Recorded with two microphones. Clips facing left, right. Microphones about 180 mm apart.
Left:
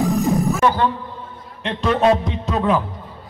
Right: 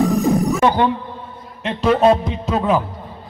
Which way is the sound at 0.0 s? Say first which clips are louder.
Right 2 dB; centre (ahead or behind).